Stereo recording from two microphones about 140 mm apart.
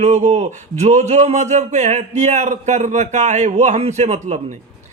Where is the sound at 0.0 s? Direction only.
55° right (ahead or behind).